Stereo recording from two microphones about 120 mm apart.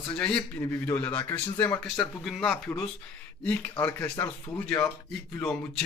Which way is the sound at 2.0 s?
5° left (ahead or behind).